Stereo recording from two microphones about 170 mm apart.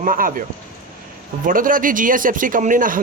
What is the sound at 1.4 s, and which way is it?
A man's voice, 55° right (ahead or behind).